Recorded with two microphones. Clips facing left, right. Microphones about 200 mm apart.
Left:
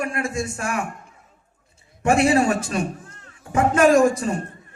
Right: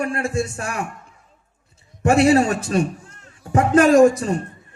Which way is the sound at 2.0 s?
35° right (ahead or behind).